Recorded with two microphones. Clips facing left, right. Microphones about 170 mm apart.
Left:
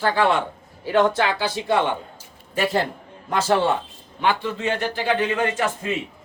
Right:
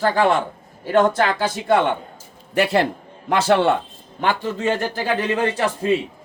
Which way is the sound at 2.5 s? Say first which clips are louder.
Right 4 dB; 75° right (ahead or behind).